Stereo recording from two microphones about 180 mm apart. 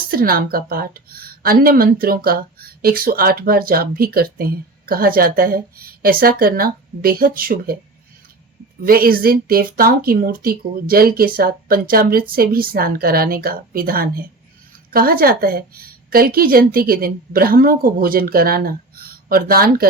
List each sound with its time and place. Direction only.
0.1 s a woman's voice: 55° right (ahead or behind)
8.8 s a woman's voice: 55° right (ahead or behind)